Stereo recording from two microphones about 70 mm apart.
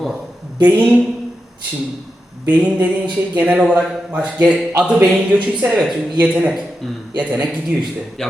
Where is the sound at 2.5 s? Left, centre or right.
Right.